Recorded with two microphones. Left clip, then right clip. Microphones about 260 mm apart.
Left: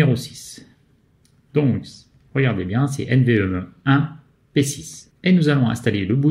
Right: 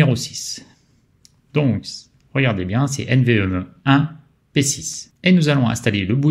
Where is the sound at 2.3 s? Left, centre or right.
Right.